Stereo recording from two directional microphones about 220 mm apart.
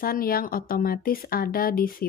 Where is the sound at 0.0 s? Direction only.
40° left (ahead or behind).